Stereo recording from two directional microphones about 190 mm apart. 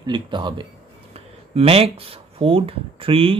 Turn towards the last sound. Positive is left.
turn(degrees=-30)  # may be behind; listen again after turning